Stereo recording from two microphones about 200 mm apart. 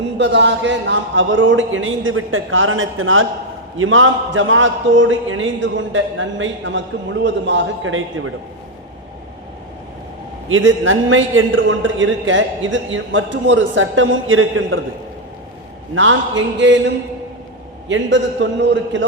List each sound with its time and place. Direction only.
0.2 s a man's voice: 60° right (ahead or behind); by 8.3 s 85° right
10.5 s a man's voice: 75° right (ahead or behind)
16.0 s a man's voice: 70° right (ahead or behind)